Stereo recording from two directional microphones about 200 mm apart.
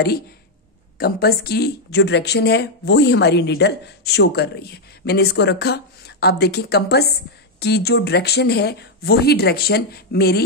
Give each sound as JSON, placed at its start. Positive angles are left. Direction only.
{"t": 0.9, "sound": "speech", "side_deg": 50}